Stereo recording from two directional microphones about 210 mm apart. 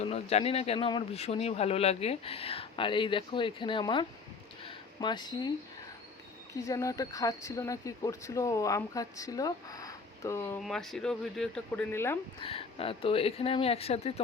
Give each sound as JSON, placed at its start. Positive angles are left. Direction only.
{"t": 0.0, "sound": "speech", "side_deg": 30}
{"t": 4.6, "sound": "a sound", "side_deg": 25}
{"t": 6.5, "sound": "speech", "side_deg": 15}
{"t": 10.6, "sound": "speech", "side_deg": 0}
{"t": 12.4, "sound": "speech", "side_deg": 25}